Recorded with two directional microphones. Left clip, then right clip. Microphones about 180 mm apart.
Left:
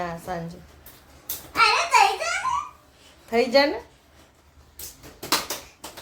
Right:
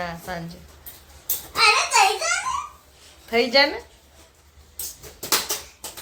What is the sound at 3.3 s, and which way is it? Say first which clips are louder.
Speech: right 1 dB; 15° left (ahead or behind).